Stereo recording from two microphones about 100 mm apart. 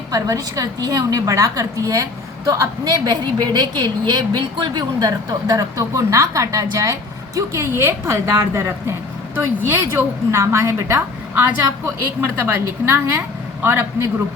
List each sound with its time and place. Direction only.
0.1 s a woman's voice: 35° right (ahead or behind); by 14.1 s 20° right (ahead or behind)